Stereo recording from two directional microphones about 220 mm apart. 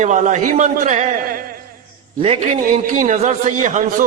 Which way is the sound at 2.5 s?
40° right (ahead or behind).